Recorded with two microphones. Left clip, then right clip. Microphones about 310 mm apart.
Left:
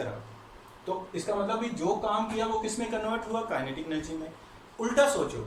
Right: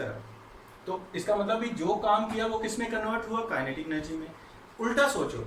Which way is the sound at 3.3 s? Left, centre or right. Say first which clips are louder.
Even; centre.